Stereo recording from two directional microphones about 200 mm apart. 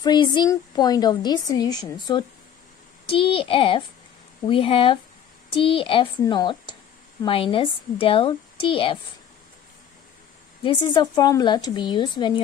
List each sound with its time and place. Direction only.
0.0 s a woman's voice: 20° left (ahead or behind)
10.6 s a woman's voice: 25° left (ahead or behind)